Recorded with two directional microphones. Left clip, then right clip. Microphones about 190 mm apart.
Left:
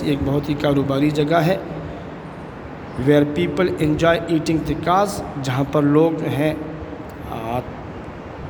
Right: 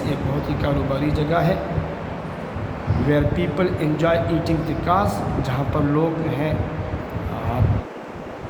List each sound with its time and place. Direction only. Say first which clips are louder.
0.0 s a man's voice: left 4 dB; 55° left (ahead or behind)
3.1 s a man's voice: left 5 dB; 55° left (ahead or behind)